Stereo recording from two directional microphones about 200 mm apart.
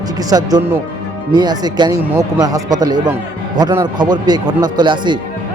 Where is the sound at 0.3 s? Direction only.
20° right (ahead or behind).